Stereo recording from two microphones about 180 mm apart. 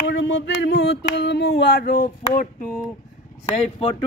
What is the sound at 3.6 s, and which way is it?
Speech, 35° left (ahead or behind).